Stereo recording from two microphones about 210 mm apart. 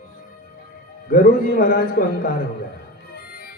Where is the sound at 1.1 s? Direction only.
40° left (ahead or behind).